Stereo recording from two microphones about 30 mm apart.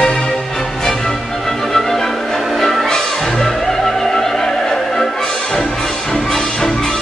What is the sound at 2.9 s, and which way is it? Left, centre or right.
Music, centre.